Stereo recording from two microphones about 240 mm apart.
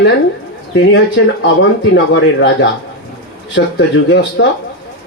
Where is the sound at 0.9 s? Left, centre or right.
Left.